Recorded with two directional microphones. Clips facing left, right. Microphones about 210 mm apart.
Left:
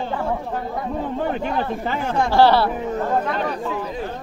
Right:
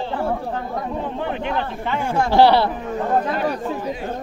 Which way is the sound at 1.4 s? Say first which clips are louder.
Left 1 dB; 40° left (ahead or behind).